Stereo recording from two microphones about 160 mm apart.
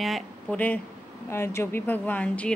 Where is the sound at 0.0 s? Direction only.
5° left (ahead or behind).